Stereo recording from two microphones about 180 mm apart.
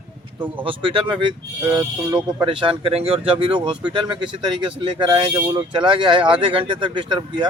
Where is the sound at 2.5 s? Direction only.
30° right (ahead or behind).